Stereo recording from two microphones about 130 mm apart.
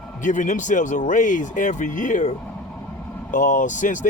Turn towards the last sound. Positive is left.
turn(degrees=75)  # may be behind; listen again after turning